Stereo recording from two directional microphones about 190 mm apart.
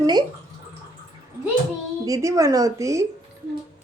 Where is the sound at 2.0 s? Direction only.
15° right (ahead or behind).